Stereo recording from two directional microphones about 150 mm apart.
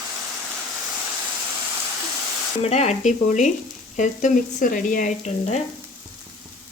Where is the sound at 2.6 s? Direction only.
45° left (ahead or behind).